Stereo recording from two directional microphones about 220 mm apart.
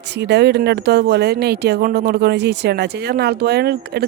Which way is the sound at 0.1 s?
50° right (ahead or behind).